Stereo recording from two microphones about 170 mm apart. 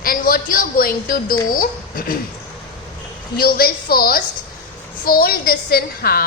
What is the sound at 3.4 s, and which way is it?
A woman's voice, 60° left (ahead or behind).